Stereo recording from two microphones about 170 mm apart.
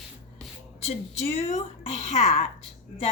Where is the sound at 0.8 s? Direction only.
35° left (ahead or behind).